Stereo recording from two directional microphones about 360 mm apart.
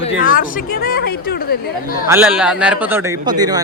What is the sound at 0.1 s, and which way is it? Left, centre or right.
Speech, left.